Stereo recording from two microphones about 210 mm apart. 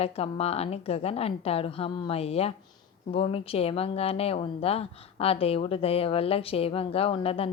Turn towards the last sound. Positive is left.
turn(degrees=25)  # may be behind; listen again after turning